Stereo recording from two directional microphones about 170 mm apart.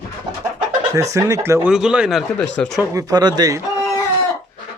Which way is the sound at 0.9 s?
20° right (ahead or behind).